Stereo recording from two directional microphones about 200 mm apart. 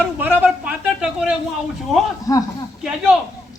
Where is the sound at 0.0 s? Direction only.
10° right (ahead or behind).